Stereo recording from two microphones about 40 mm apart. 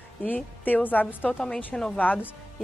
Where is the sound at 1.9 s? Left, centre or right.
Left.